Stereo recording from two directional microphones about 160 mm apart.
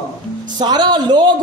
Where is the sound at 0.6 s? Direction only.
25° right (ahead or behind).